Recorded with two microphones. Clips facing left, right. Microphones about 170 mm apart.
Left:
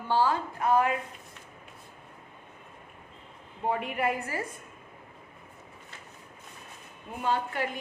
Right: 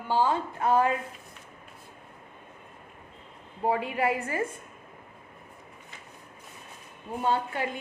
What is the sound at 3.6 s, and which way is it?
Speech, 25° right (ahead or behind).